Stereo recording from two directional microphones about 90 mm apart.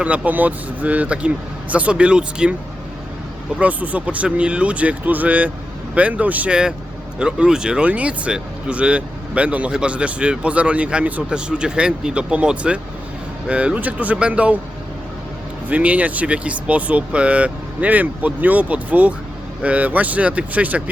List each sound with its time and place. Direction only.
0.0 s speech: 15° right (ahead or behind)
3.6 s speech: 15° right (ahead or behind)
15.7 s speech: 15° right (ahead or behind)